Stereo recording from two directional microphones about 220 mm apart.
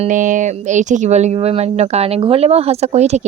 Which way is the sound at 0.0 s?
35° right (ahead or behind).